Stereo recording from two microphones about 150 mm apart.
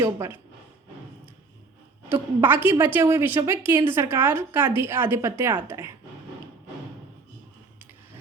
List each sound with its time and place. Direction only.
0.0 s speech: 20° right (ahead or behind)
2.0 s a woman's voice: 15° right (ahead or behind)